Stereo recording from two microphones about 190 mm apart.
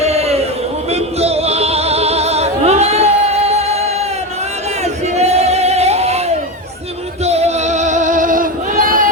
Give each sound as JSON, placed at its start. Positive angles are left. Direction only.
{"t": 0.0, "sound": "a sound", "side_deg": -35}
{"t": 0.9, "sound": "music", "side_deg": -35}
{"t": 5.1, "sound": "singing", "side_deg": -35}
{"t": 7.3, "sound": "male singing", "side_deg": -35}